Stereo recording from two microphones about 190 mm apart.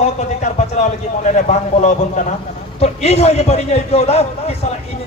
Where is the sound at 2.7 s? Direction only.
35° left (ahead or behind).